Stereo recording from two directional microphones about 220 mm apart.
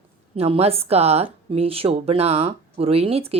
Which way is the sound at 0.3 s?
25° right (ahead or behind).